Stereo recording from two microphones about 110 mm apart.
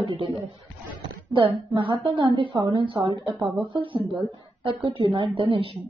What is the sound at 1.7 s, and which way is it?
A woman's voice, 50° right (ahead or behind).